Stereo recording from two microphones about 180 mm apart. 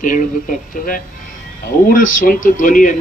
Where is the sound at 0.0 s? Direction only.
45° left (ahead or behind).